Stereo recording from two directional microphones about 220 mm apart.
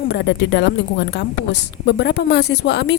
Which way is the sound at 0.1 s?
50° left (ahead or behind).